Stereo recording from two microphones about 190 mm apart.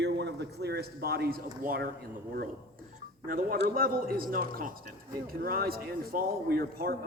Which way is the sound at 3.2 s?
50° right (ahead or behind).